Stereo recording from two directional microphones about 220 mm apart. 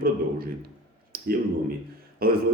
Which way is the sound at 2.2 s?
45° right (ahead or behind).